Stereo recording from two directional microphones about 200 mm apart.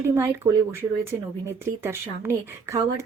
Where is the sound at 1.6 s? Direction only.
10° right (ahead or behind).